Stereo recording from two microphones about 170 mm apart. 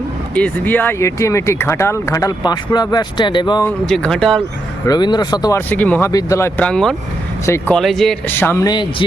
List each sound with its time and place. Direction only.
0.3 s speech: 10° left (ahead or behind); by 3.7 s 25° left (ahead or behind)
3.7 s speech: 5° left (ahead or behind)
4.9 s speech: 25° left (ahead or behind); by 6.1 s 10° left (ahead or behind)
6.1 s speech: 20° left (ahead or behind)
7.4 s speech: 15° left (ahead or behind)
7.8 s speech: centre (ahead or behind)
8.4 s speech: 15° left (ahead or behind)